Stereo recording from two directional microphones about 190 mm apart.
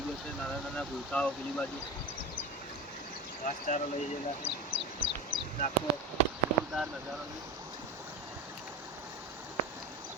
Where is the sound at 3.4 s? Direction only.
40° left (ahead or behind).